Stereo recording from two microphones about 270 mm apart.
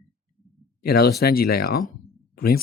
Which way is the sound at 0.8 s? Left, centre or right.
Left.